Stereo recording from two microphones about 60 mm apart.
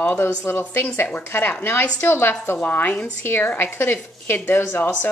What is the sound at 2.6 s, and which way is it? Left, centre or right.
Speech, left.